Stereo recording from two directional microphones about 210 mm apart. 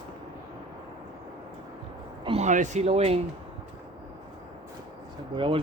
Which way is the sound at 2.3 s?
30° right (ahead or behind).